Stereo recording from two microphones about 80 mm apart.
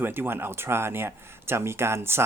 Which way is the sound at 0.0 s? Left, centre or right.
Right.